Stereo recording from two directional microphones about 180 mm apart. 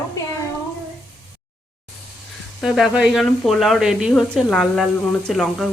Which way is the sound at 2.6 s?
Centre (ahead or behind).